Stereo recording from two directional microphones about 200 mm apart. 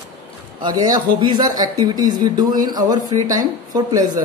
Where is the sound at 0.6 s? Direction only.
20° right (ahead or behind).